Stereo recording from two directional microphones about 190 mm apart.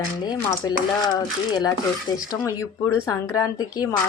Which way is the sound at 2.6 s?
20° left (ahead or behind).